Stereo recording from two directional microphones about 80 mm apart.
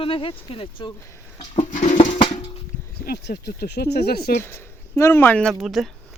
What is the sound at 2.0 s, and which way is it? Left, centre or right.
Music, left.